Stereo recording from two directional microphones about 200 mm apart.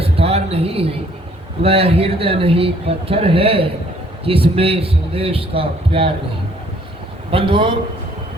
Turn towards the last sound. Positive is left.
turn(degrees=-25)  # may be behind; listen again after turning